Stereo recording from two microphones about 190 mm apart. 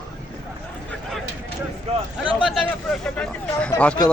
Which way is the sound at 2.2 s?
5° right (ahead or behind).